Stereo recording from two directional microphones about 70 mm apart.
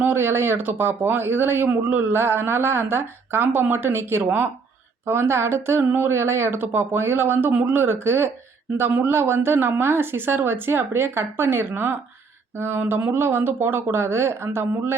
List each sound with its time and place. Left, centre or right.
0.0 s speech: right
8.9 s a man's voice: right
9.1 s speech: right